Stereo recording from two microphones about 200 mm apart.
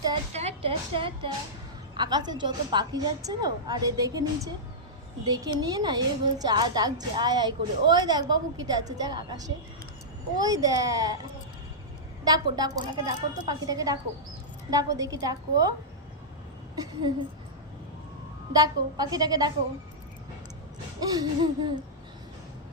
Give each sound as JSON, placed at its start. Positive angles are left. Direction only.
{"t": 0.3, "sound": "a woman's voice", "side_deg": -30}
{"t": 12.2, "sound": "a woman's voice", "side_deg": -20}
{"t": 16.7, "sound": "a woman's voice", "side_deg": -20}
{"t": 18.5, "sound": "a woman's voice", "side_deg": -20}
{"t": 21.0, "sound": "a woman's voice", "side_deg": -20}